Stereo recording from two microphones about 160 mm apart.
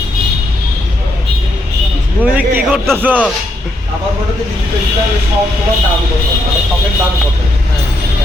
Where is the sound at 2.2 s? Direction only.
10° right (ahead or behind).